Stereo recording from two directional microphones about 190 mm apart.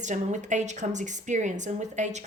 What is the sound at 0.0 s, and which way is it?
A woman's voice, 40° right (ahead or behind).